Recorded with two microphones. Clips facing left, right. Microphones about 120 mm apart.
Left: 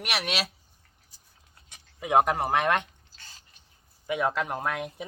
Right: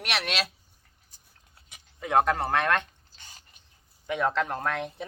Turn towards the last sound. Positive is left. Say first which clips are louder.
# right 1 dB
turn(degrees=10)  # may be behind; listen again after turning